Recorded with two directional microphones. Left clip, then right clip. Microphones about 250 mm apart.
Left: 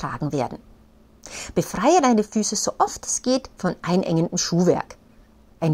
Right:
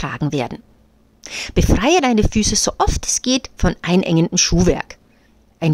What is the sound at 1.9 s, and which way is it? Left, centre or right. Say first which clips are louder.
Speech: right 1 dB; right.